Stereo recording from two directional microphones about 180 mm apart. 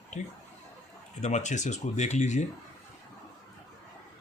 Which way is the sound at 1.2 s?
40° left (ahead or behind).